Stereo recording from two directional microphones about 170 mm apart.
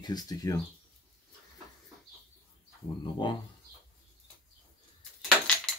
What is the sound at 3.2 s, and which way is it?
Speech, 25° left (ahead or behind).